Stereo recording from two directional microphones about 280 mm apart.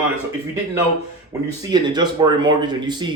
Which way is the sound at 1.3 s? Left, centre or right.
Centre.